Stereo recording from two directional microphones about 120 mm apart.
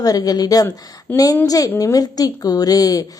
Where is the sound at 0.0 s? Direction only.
30° left (ahead or behind).